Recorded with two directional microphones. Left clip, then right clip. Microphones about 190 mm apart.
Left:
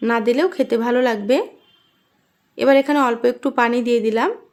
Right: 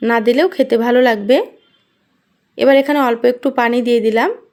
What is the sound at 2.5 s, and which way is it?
Speech, 15° right (ahead or behind).